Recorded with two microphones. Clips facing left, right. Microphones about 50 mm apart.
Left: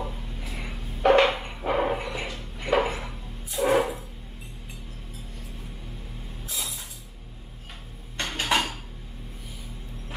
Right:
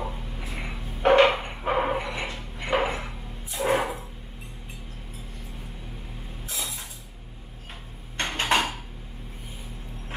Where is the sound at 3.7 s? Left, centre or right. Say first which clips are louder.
Left 1 dB; right.